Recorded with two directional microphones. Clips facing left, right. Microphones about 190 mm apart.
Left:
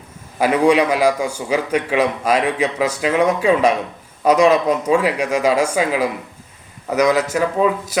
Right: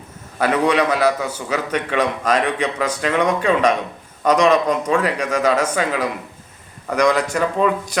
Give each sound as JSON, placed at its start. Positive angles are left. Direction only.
{"t": 0.3, "sound": "a man's voice", "side_deg": 10}